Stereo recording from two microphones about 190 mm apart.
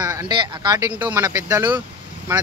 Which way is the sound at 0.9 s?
10° right (ahead or behind).